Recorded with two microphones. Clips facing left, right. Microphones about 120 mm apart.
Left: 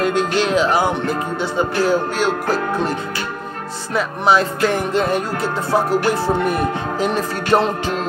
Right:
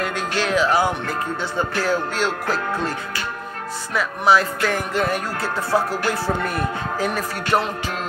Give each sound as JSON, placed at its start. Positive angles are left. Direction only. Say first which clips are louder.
{"t": 0.0, "sound": "music", "louder": "left 6 dB", "side_deg": 20}
{"t": 3.9, "sound": "music", "louder": "left 2 dB", "side_deg": 25}